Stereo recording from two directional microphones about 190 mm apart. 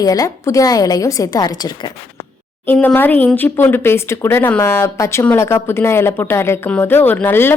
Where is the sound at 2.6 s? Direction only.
10° left (ahead or behind).